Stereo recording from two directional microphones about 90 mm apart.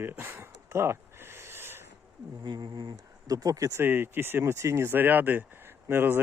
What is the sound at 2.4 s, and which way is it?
Speech, 50° right (ahead or behind).